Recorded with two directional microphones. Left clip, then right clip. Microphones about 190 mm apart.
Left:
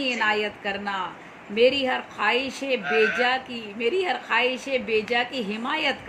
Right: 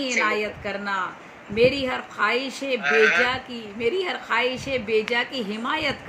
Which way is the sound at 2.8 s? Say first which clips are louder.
Right 5 dB; 50° right (ahead or behind).